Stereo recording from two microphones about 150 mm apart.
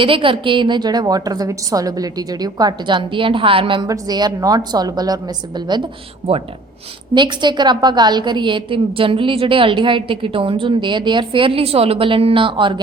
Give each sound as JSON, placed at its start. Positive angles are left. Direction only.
{"t": 0.0, "sound": "a woman's voice", "side_deg": -35}
{"t": 7.1, "sound": "a woman's voice", "side_deg": -30}